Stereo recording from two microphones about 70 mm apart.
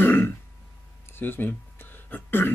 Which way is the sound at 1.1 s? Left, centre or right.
Left.